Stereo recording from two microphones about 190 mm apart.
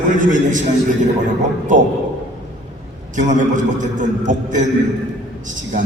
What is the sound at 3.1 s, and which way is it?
A man's voice, 40° right (ahead or behind).